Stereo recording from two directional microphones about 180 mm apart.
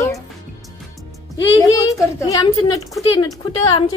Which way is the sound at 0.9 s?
20° left (ahead or behind).